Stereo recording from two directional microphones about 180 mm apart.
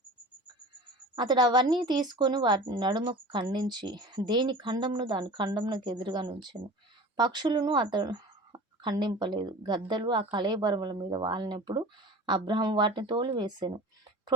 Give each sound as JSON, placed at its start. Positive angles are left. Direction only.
{"t": 1.1, "sound": "speech", "side_deg": -25}